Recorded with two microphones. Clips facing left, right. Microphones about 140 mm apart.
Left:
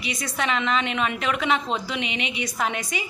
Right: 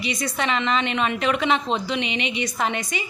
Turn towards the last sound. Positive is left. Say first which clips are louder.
# right 2 dB
turn(degrees=5)  # may be behind; listen again after turning